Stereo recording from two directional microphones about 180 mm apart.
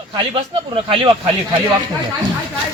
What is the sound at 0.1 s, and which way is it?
Speech, 30° right (ahead or behind).